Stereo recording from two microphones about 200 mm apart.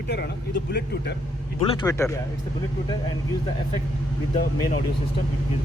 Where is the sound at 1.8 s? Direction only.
15° left (ahead or behind).